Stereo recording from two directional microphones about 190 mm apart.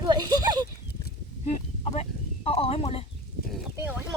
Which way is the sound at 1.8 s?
35° left (ahead or behind).